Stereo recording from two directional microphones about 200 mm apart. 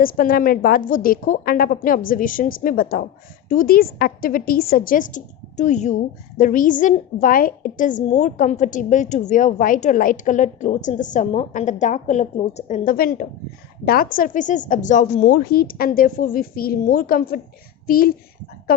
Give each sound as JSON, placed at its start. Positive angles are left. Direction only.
{"t": 0.0, "sound": "a woman's voice", "side_deg": 45}